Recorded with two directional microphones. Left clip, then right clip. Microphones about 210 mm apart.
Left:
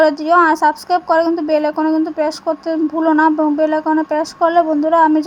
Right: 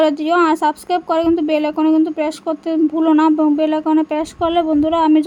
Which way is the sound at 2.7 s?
5° left (ahead or behind).